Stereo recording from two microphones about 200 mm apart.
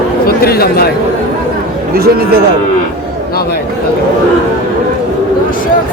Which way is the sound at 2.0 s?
50° right (ahead or behind).